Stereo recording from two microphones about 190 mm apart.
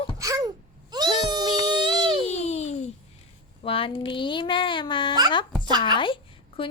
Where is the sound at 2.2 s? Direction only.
35° left (ahead or behind).